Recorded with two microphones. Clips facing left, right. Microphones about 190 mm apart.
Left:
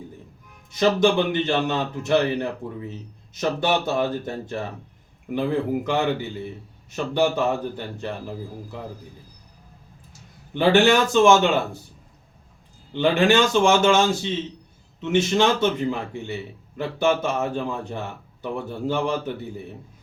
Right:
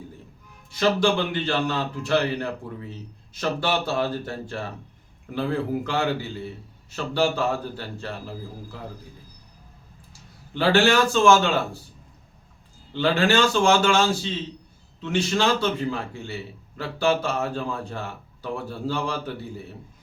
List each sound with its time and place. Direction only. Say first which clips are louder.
0.7 s a man's voice: left 2 dB; 20° left (ahead or behind)
10.1 s speech: left 4 dB; 20° left (ahead or behind)
12.9 s a man's voice: left 3 dB; 20° left (ahead or behind)